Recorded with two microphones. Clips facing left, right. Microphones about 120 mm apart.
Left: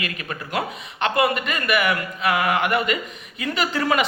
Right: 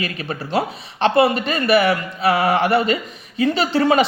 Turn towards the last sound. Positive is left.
turn(degrees=-30)  # may be behind; listen again after turning